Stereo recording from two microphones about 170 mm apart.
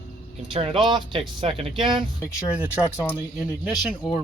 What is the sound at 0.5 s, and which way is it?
Speech, 35° right (ahead or behind).